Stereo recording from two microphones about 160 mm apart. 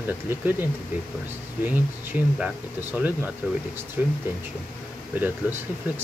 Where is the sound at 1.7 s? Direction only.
10° right (ahead or behind).